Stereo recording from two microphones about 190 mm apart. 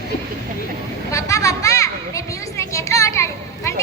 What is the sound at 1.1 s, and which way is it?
Children playing, 15° left (ahead or behind).